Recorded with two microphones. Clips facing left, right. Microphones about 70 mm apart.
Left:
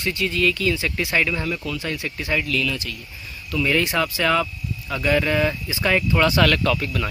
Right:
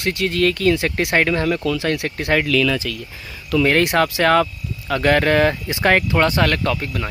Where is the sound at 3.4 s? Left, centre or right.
Right.